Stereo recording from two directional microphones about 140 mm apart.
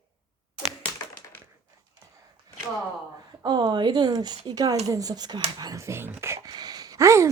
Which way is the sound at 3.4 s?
30° right (ahead or behind).